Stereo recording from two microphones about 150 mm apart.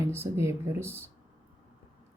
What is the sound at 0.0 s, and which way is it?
Speech, 15° right (ahead or behind).